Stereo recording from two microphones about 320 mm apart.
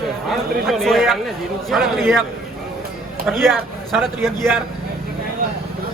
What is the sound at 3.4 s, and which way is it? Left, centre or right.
Speech, centre.